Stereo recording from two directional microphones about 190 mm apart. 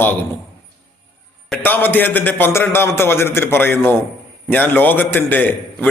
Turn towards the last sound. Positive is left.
turn(degrees=10)  # may be behind; listen again after turning